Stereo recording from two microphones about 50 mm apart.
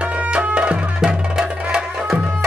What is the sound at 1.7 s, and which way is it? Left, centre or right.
Music, centre.